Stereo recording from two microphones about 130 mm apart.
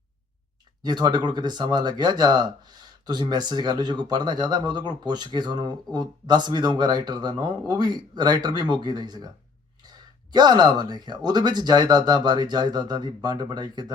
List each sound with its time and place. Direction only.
0.8 s speech: 35° right (ahead or behind)